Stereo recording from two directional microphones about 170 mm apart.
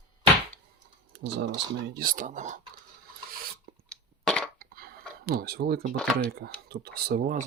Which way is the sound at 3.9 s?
5° left (ahead or behind).